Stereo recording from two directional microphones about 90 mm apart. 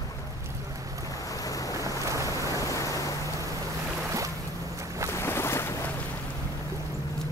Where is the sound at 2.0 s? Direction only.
35° right (ahead or behind).